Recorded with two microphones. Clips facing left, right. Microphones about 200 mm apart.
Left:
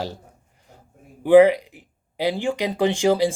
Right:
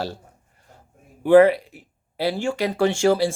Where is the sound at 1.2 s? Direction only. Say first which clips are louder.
Left 1 dB; 15° left (ahead or behind).